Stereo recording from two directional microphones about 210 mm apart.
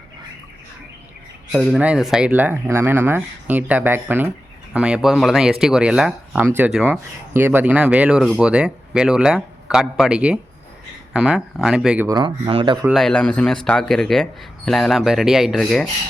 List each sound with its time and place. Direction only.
1.5 s speech: centre (ahead or behind)
12.0 s speech: 20° right (ahead or behind)
12.9 s speech: centre (ahead or behind)